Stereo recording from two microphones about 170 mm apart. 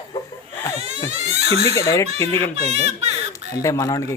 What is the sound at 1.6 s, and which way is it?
Speech, 20° left (ahead or behind).